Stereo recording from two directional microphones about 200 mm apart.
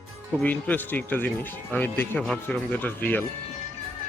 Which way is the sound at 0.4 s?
10° left (ahead or behind).